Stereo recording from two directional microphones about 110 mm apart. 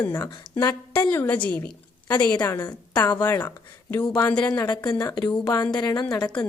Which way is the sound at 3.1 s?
15° left (ahead or behind).